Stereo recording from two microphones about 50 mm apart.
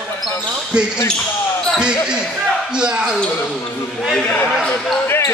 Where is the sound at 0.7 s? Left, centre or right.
Centre.